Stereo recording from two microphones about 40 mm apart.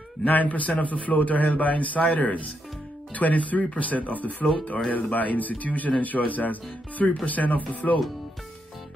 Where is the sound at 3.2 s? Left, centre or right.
Left.